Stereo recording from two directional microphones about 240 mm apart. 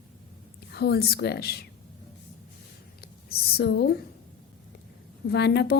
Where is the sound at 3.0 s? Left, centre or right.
Left.